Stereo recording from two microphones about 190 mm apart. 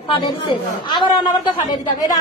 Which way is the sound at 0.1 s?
25° left (ahead or behind).